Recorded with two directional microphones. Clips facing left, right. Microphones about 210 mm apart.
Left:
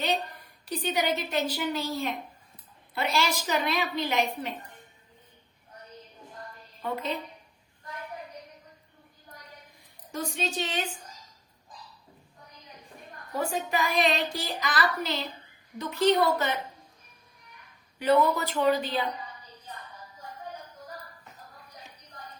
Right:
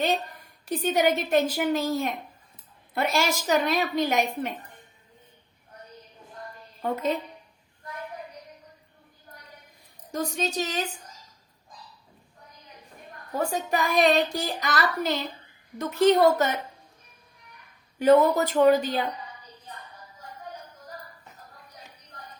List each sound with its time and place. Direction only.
0.6 s music: 45° right (ahead or behind)
6.8 s music: 45° right (ahead or behind)
10.1 s a woman's voice: 40° right (ahead or behind)
13.7 s music: 45° right (ahead or behind)
18.0 s music: 45° right (ahead or behind)